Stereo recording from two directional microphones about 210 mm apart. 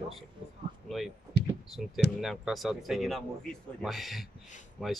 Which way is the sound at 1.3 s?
50° left (ahead or behind).